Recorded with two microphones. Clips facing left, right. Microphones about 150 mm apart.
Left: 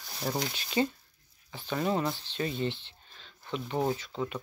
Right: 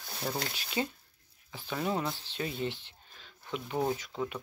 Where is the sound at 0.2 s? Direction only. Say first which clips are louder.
Left 3 dB; 15° left (ahead or behind).